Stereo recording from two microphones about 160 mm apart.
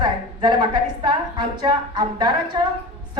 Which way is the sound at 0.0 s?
25° right (ahead or behind).